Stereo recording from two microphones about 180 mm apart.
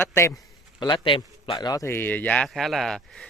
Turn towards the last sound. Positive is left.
turn(degrees=0)  # may be behind; listen again after turning